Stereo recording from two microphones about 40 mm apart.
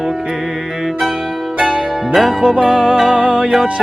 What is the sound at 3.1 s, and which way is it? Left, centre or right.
Music, right.